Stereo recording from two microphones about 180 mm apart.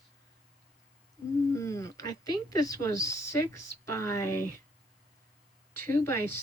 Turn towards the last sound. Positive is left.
turn(degrees=15)  # may be behind; listen again after turning